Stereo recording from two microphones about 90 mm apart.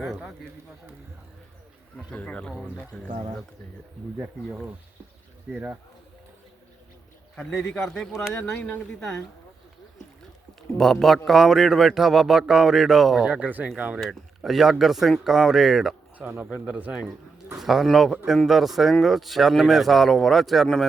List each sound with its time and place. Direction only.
0.0 s a man's voice: 5° right (ahead or behind)
2.0 s speech: 15° left (ahead or behind)
2.5 s speech: centre (ahead or behind)
3.1 s speech: 70° right (ahead or behind)
5.5 s speech: 5° right (ahead or behind)
7.3 s speech: 10° left (ahead or behind)
8.3 s speech: 20° left (ahead or behind)
8.9 s speech: 5° left (ahead or behind)
10.8 s speech: centre (ahead or behind); by 14.0 s 15° right (ahead or behind)
14.1 s speech: 5° right (ahead or behind)
16.1 s a man's voice: 20° right (ahead or behind); by 20.8 s centre (ahead or behind)